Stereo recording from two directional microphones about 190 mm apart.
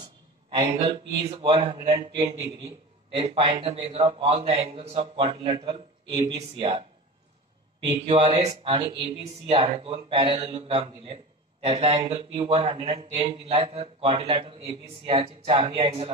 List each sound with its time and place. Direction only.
1.2 s a man's voice: 20° right (ahead or behind)
8.0 s a man's voice: 30° right (ahead or behind)